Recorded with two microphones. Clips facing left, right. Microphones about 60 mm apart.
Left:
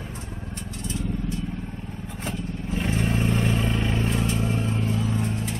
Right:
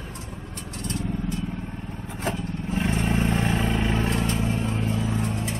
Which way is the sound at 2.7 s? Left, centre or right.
Centre.